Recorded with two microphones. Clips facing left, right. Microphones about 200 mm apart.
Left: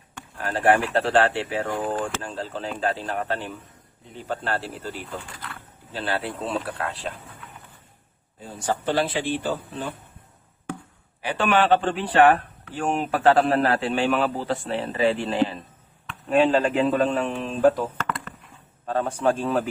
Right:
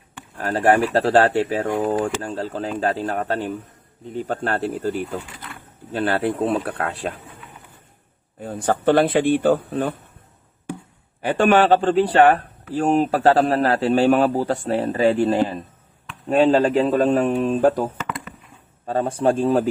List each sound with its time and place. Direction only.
0.3 s speech: 40° right (ahead or behind)
8.4 s speech: 60° right (ahead or behind)
11.2 s speech: 50° right (ahead or behind)
17.9 s a sound: 10° right (ahead or behind)
18.9 s speech: 35° right (ahead or behind)